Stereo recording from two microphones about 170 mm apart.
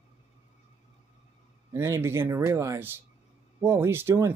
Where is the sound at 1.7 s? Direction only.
15° right (ahead or behind).